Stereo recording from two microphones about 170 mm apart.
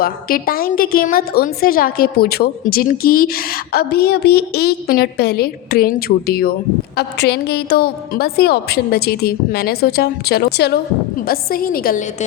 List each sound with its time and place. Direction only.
0.0 s a woman's voice: 60° left (ahead or behind)
11.3 s a woman's voice: 60° left (ahead or behind)